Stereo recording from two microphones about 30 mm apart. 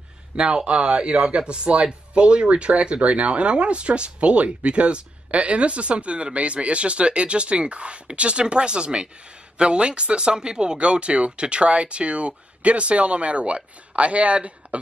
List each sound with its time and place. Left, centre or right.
0.4 s speech: right